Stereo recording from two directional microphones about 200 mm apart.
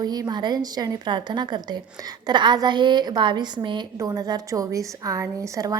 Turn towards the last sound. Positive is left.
turn(degrees=-15)  # may be behind; listen again after turning